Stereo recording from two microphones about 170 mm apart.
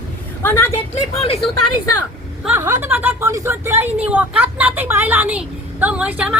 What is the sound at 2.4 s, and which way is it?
A woman's voice, 15° right (ahead or behind).